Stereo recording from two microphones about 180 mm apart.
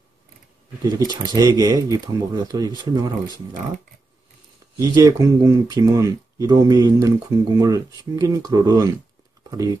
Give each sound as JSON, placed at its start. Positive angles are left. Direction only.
{"t": 0.9, "sound": "speech", "side_deg": -20}
{"t": 4.7, "sound": "speech", "side_deg": -20}